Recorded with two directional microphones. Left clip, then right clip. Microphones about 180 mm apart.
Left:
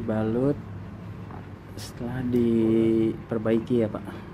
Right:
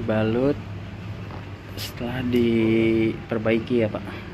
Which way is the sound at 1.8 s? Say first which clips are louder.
Right 4 dB; 15° left (ahead or behind).